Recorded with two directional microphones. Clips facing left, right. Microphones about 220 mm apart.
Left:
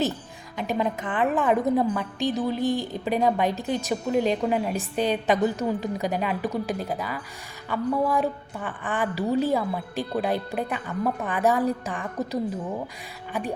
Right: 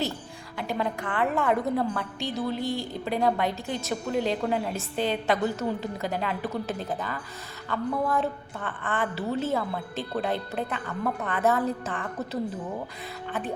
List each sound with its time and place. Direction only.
0.5 s a woman's voice: 15° left (ahead or behind)